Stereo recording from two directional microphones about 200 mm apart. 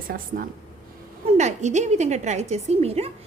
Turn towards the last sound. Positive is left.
turn(degrees=-30)  # may be behind; listen again after turning